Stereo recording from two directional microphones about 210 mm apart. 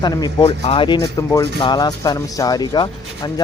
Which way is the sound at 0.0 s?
20° left (ahead or behind).